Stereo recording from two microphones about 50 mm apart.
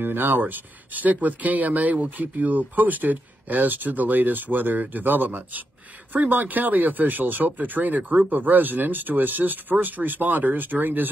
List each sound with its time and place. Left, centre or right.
0.0 s speech: right
0.4 s speech: right